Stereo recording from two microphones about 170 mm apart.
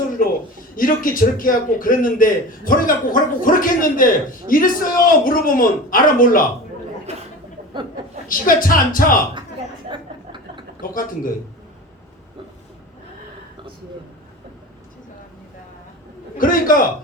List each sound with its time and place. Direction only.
0.8 s a man's voice: 55° left (ahead or behind)
7.1 s a sound: 40° right (ahead or behind)
7.7 s speech: 30° right (ahead or behind)
8.3 s a man's voice: 55° left (ahead or behind)
9.9 s a sound: 30° right (ahead or behind)
10.8 s a man's voice: 55° left (ahead or behind)
16.4 s a man's voice: 55° left (ahead or behind)